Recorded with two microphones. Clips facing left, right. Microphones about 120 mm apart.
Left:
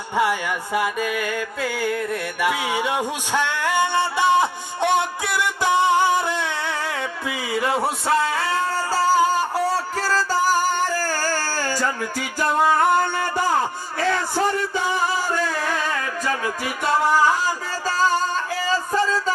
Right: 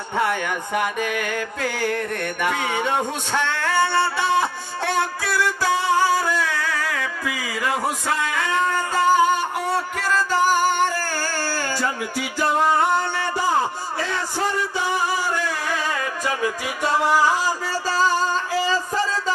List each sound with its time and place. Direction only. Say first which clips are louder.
0.2 s music: left 1 dB; 5° left (ahead or behind); by 12.8 s 45° left (ahead or behind)